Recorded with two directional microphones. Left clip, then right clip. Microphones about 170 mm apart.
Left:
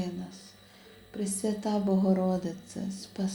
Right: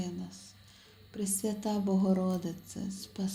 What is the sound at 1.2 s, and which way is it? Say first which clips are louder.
Speech: left 3 dB; 30° right (ahead or behind).